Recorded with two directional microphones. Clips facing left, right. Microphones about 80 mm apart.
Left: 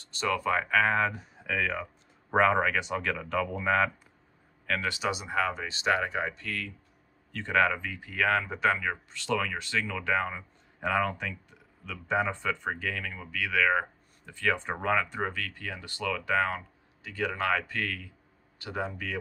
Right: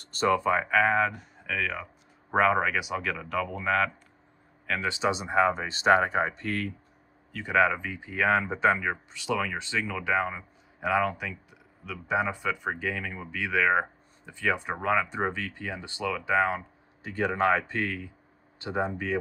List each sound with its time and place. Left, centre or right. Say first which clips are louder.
0.0 s speech: right 6 dB; right
0.3 s speech: right 2 dB; centre
4.6 s speech: right 3 dB; centre; by 6.7 s right
7.3 s speech: right 2 dB; centre
15.0 s speech: right 3 dB; centre
17.0 s speech: right 5 dB; right